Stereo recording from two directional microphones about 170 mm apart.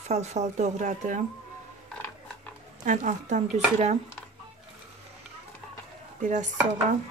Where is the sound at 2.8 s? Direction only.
45° right (ahead or behind).